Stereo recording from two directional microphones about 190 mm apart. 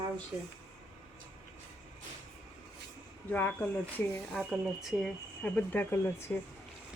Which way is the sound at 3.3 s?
10° left (ahead or behind).